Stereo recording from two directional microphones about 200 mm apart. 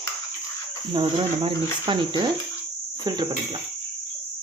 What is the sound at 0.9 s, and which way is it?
Cricket, 25° right (ahead or behind).